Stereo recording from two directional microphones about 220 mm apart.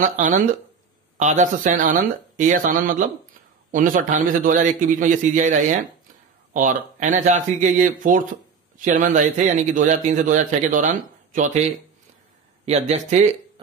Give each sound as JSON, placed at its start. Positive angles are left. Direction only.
{"t": 1.1, "sound": "speech", "side_deg": -35}
{"t": 12.6, "sound": "speech", "side_deg": -30}